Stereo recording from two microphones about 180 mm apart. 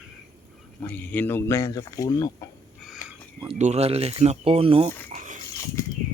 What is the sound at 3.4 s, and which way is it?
Speech, 40° right (ahead or behind).